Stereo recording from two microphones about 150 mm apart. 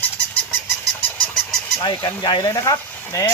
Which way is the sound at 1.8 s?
30° left (ahead or behind).